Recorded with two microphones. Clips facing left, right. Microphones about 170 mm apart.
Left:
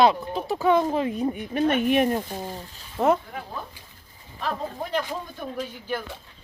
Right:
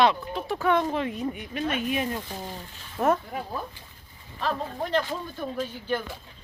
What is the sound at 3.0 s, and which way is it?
Speech, 15° left (ahead or behind).